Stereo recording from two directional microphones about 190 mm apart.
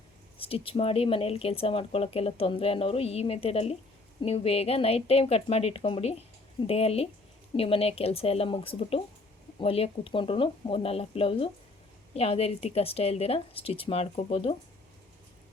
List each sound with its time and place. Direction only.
0.3 s speech: 30° left (ahead or behind)